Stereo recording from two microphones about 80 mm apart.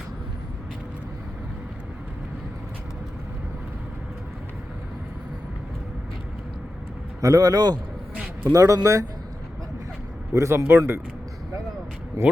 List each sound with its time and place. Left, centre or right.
7.2 s a man's voice: right
8.5 s a man's voice: right
10.3 s speech: right
12.2 s a man's voice: right